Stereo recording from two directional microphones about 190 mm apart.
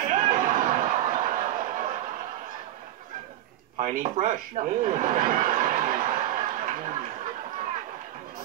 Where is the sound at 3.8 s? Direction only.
40° right (ahead or behind).